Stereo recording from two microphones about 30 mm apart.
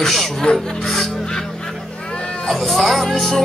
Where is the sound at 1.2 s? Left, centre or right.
Left.